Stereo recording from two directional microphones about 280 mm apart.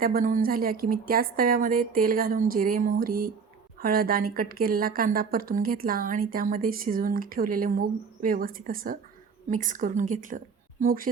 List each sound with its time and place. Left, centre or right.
0.0 s a woman's voice: right